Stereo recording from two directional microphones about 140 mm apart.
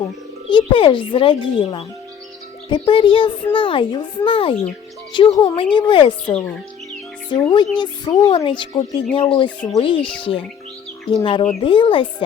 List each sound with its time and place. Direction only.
0.5 s a child's voice: 35° left (ahead or behind)